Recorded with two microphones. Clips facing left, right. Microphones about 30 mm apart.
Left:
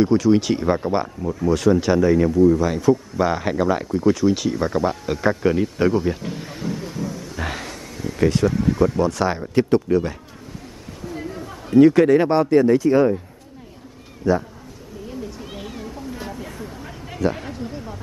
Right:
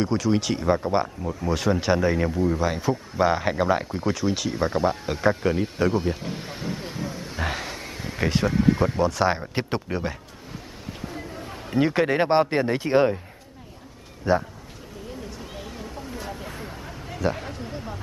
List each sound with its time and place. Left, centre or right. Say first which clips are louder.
0.0 s speech: left 7 dB; centre
6.3 s speech: left 3 dB; centre
6.8 s vehicle: left 3 dB; right
7.3 s a sound: right 1 dB; centre
7.7 s a sound: left 3 dB; right
8.2 s a man's voice: left 4 dB; centre
9.0 s speech: left 1 dB; centre
9.5 s a man's voice: left 10 dB; right
11.4 s a man's voice: left 10 dB; right
14.2 s a man's voice: left 2 dB; right
15.5 s a sound: left 4 dB; centre
16.3 s a sound: left 2 dB; centre